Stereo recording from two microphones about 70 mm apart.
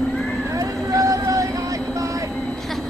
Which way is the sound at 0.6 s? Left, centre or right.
Right.